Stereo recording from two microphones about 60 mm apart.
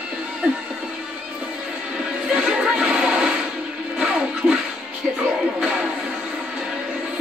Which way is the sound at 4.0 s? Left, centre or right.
Centre.